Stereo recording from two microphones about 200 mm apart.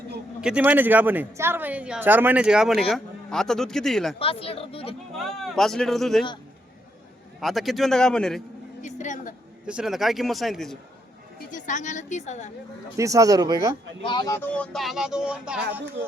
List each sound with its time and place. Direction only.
0.4 s a woman's voice: 5° right (ahead or behind)
4.2 s speech: 30° left (ahead or behind)
5.1 s speech: centre (ahead or behind)
7.4 s speech: centre (ahead or behind)
8.8 s speech: 35° left (ahead or behind)
9.6 s speech: 5° right (ahead or behind)
11.3 s a woman's voice: 40° left (ahead or behind)
13.0 s a woman's voice: 15° right (ahead or behind)
14.0 s speech: 20° left (ahead or behind); by 15.6 s 5° right (ahead or behind)